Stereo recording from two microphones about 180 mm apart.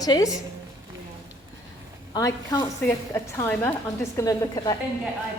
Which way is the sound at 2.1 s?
20° left (ahead or behind).